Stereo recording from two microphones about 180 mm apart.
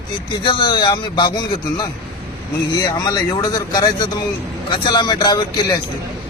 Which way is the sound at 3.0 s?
20° left (ahead or behind).